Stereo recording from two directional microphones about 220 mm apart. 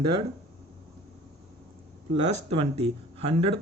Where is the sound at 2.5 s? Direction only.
30° right (ahead or behind).